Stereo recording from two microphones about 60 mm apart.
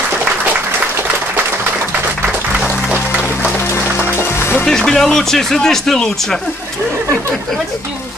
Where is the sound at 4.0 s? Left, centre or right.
Left.